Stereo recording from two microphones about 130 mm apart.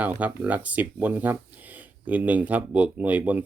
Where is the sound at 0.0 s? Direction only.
10° right (ahead or behind).